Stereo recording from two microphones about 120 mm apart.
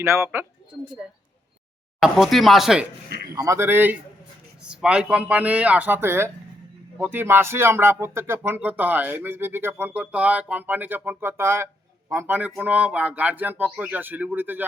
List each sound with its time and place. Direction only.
0.0 s speech: 20° right (ahead or behind)
2.0 s speech: centre (ahead or behind)
3.3 s speech: 25° right (ahead or behind)
4.6 s speech: 5° right (ahead or behind)